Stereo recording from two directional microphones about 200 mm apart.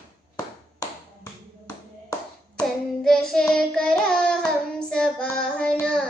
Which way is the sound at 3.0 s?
5° left (ahead or behind).